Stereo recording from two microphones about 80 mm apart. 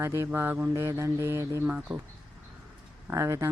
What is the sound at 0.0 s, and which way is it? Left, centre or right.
Speech, right.